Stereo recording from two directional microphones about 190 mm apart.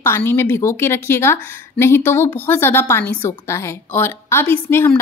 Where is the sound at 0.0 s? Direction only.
10° left (ahead or behind).